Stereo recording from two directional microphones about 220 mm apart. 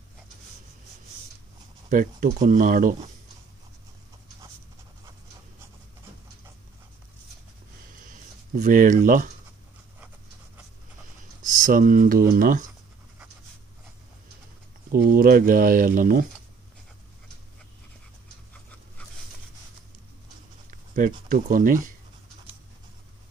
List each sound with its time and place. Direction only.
1.9 s speech: 35° right (ahead or behind)
8.0 s a sound: 35° right (ahead or behind)
11.4 s speech: 35° right (ahead or behind)
14.9 s speech: 40° right (ahead or behind)
18.5 s pant: 5° left (ahead or behind)
20.7 s speech: 40° right (ahead or behind)